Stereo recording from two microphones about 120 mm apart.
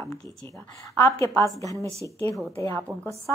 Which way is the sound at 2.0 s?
30° right (ahead or behind).